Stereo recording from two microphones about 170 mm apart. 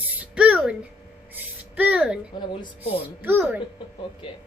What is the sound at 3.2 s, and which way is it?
Speech, 10° right (ahead or behind).